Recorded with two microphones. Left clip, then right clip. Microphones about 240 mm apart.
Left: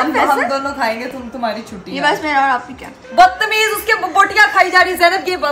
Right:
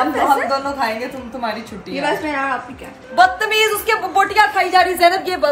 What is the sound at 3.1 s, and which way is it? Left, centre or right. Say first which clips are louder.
A woman's voice: left 3 dB; centre.